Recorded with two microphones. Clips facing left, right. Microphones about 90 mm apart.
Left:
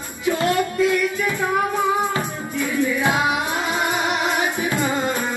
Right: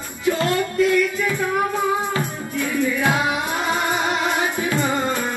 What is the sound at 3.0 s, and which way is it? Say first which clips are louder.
Music: even; 20° left (ahead or behind).